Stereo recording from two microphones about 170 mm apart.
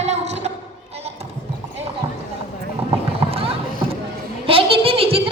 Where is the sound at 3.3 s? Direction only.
35° right (ahead or behind).